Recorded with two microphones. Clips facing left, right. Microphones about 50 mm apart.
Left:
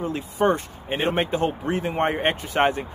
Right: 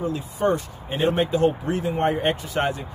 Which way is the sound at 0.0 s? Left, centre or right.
Left.